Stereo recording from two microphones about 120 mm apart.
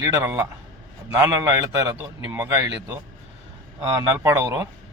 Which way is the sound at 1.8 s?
20° right (ahead or behind).